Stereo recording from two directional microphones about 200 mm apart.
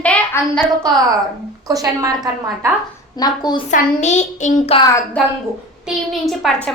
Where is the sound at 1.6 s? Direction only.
15° right (ahead or behind).